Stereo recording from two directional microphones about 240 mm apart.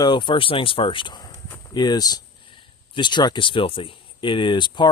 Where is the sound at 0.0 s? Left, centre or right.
Centre.